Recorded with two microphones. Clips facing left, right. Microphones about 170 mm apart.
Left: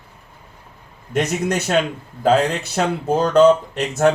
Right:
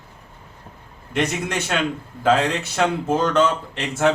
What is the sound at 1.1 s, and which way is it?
Speech, 40° left (ahead or behind).